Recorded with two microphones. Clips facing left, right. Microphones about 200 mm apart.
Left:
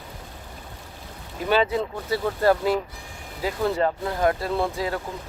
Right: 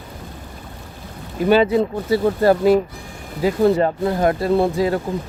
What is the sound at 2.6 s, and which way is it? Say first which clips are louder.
Speech: right 9 dB; 50° right (ahead or behind).